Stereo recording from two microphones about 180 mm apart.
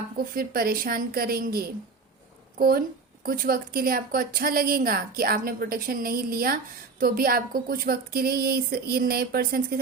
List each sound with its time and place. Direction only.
0.2 s speech: 55° right (ahead or behind)